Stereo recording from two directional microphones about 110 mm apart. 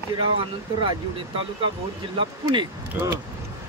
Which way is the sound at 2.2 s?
45° right (ahead or behind).